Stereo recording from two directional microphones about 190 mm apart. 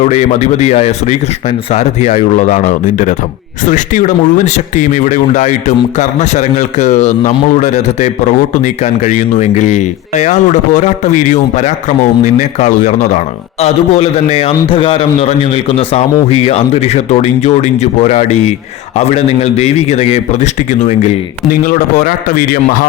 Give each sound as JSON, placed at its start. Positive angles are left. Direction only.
{"t": 0.0, "sound": "speech", "side_deg": 35}